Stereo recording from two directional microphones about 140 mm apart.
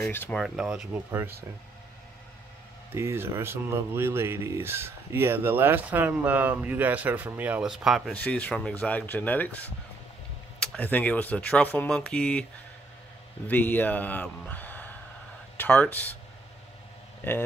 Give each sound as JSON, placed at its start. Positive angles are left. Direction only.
{"t": 0.0, "sound": "speech", "side_deg": 10}
{"t": 0.4, "sound": "speech", "side_deg": -5}
{"t": 2.9, "sound": "speech", "side_deg": -15}
{"t": 8.1, "sound": "speech", "side_deg": 10}
{"t": 13.5, "sound": "a man's voice", "side_deg": 10}